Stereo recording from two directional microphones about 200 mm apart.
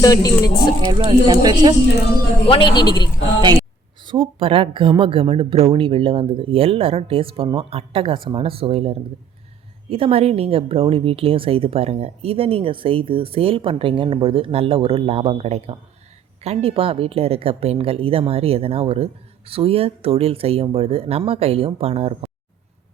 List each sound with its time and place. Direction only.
0.0 s speech: 20° left (ahead or behind)
0.9 s speech: 20° right (ahead or behind)
2.5 s speech: 25° left (ahead or behind)
4.0 s speech: 25° right (ahead or behind)